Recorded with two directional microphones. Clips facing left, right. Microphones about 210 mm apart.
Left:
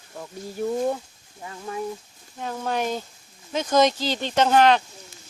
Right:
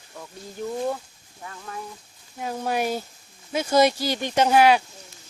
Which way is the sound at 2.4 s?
10° right (ahead or behind).